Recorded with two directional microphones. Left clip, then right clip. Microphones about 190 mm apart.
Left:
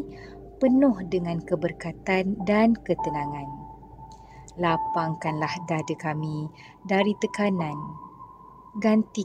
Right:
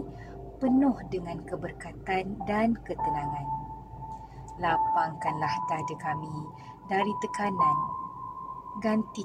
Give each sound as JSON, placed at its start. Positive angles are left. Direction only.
{"t": 0.6, "sound": "a woman's voice", "side_deg": 45}
{"t": 4.6, "sound": "a woman's voice", "side_deg": 45}
{"t": 8.7, "sound": "a woman's voice", "side_deg": 50}